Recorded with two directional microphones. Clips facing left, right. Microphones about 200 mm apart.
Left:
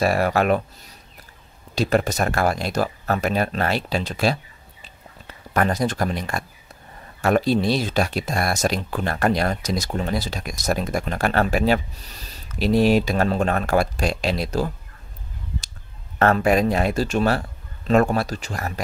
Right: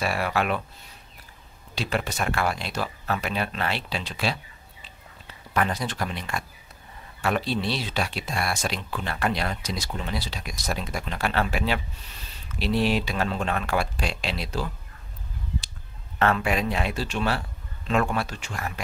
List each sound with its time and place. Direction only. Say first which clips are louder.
0.0 s speech: left 7 dB; 45° left (ahead or behind)
1.8 s speech: left 8 dB; 40° left (ahead or behind)
5.5 s speech: left 5 dB; 45° left (ahead or behind)
16.2 s speech: left 6 dB; 45° left (ahead or behind)